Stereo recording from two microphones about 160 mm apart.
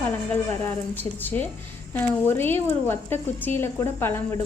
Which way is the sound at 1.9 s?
15° left (ahead or behind).